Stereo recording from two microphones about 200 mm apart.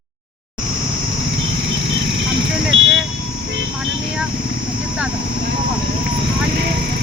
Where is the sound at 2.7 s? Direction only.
75° right (ahead or behind).